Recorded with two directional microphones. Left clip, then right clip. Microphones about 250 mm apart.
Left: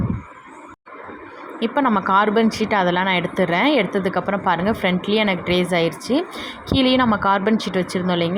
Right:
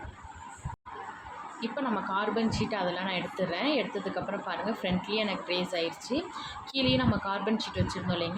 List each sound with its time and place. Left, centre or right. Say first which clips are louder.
1.6 s speech: left 14 dB; left